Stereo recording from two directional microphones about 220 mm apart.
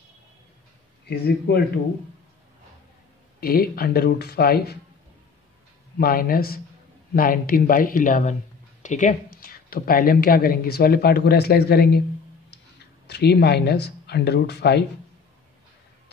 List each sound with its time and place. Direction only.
1.0 s speech: 45° left (ahead or behind)
3.3 s speech: 45° left (ahead or behind)
5.9 s speech: 40° left (ahead or behind)
13.0 s speech: 50° left (ahead or behind)